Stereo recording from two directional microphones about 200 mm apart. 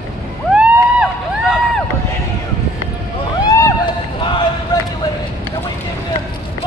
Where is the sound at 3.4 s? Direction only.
20° left (ahead or behind).